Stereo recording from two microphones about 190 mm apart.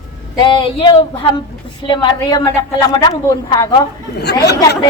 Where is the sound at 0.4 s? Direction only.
25° left (ahead or behind).